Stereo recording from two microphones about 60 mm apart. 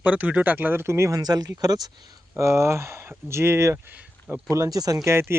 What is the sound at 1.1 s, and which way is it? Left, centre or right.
Speech, right.